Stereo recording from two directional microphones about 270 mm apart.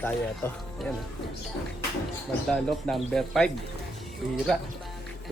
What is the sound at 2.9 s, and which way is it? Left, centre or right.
Speech, centre.